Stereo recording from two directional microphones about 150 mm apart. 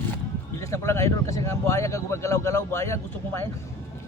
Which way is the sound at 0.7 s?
20° left (ahead or behind).